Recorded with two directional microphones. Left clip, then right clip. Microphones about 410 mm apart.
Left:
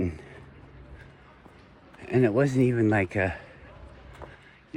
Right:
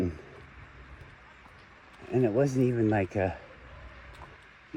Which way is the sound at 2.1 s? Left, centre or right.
Left.